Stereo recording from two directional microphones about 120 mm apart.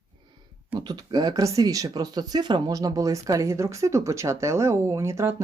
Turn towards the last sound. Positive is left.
turn(degrees=-25)  # may be behind; listen again after turning